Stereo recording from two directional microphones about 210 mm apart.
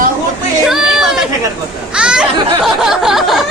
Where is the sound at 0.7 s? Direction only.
Centre (ahead or behind).